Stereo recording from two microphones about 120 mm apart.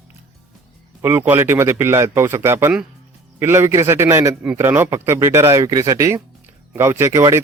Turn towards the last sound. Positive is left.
turn(degrees=-30)  # may be behind; listen again after turning